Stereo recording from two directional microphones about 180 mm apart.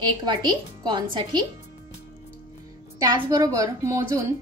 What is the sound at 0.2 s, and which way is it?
Speech, 25° right (ahead or behind).